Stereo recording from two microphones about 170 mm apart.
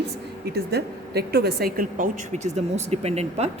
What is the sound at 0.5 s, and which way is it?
A woman's voice, 70° right (ahead or behind).